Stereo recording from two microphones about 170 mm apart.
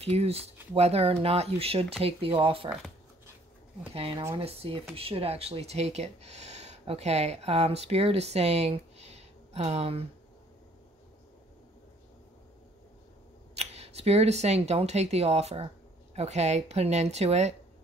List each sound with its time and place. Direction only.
0.0 s speech: 35° right (ahead or behind)
3.9 s speech: 35° right (ahead or behind)
13.6 s speech: 40° right (ahead or behind)